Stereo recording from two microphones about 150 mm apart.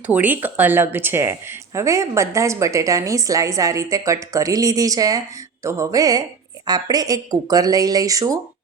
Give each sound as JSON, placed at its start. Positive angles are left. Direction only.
{"t": 0.1, "sound": "speech", "side_deg": -10}